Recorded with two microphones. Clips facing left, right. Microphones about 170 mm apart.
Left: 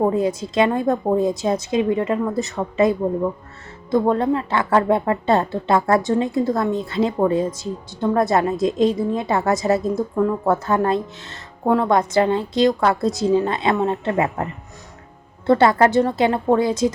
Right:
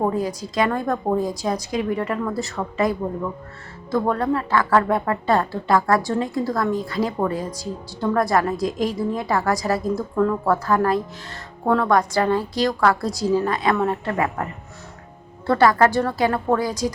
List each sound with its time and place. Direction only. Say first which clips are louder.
0.0 s a woman's voice: left 4 dB; 25° left (ahead or behind)
3.9 s a woman's voice: left 3 dB; 20° left (ahead or behind)
15.4 s a woman's voice: left 2 dB; 25° left (ahead or behind)